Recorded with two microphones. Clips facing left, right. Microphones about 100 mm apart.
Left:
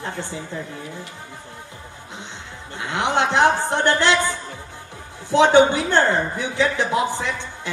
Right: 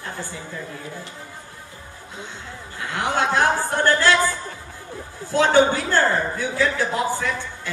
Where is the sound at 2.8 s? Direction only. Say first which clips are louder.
Left 2 dB; 20° left (ahead or behind).